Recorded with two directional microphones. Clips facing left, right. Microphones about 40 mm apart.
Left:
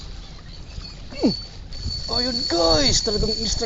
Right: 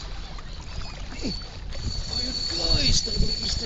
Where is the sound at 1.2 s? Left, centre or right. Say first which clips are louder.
Left 13 dB; right.